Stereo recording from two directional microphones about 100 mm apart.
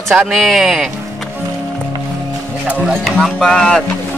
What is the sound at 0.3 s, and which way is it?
Speech, centre (ahead or behind).